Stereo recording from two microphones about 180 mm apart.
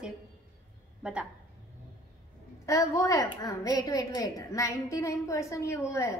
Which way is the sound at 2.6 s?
15° left (ahead or behind).